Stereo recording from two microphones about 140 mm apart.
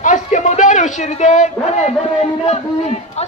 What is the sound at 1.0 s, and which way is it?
A man's voice, 55° left (ahead or behind).